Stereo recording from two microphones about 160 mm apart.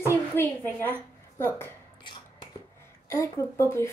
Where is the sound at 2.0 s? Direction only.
30° left (ahead or behind).